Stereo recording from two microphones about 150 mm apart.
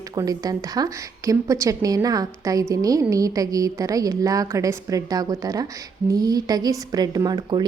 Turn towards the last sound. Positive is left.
turn(degrees=-30)  # may be behind; listen again after turning